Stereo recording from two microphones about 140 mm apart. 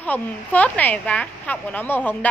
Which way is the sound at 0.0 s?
10° left (ahead or behind).